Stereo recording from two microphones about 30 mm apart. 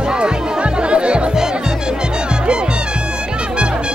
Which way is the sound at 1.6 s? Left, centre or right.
Right.